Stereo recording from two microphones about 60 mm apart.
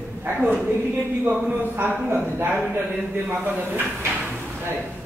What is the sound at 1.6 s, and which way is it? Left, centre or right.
Speech, right.